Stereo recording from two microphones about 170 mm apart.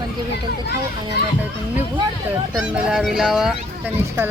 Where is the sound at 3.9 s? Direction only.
15° right (ahead or behind).